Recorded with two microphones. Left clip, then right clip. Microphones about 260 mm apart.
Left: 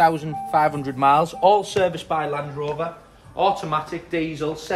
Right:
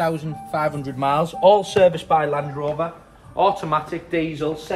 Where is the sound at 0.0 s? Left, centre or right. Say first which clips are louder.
Left 5 dB; left.